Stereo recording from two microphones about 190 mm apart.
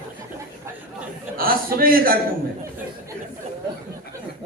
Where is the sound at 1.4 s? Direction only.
50° right (ahead or behind).